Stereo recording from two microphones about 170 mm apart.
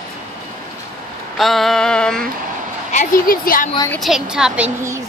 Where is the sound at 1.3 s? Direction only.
Centre (ahead or behind).